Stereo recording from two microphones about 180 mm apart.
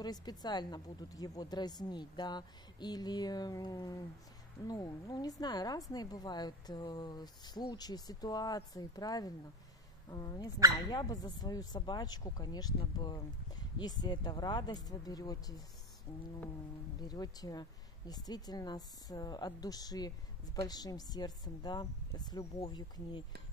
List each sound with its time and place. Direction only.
0.0 s speech: 20° left (ahead or behind)
17.1 s speech: 20° left (ahead or behind)